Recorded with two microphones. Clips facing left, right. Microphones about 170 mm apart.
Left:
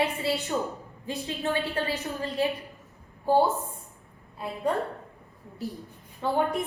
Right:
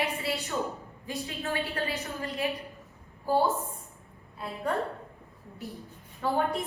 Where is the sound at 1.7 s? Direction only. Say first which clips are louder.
Left 3 dB; 35° left (ahead or behind).